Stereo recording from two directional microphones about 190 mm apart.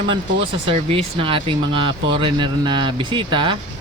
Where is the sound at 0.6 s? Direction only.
30° right (ahead or behind).